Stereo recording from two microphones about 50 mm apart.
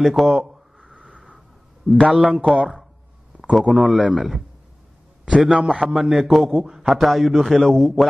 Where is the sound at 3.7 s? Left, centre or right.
Centre.